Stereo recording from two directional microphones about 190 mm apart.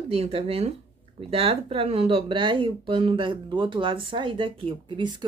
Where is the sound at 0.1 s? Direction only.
30° right (ahead or behind).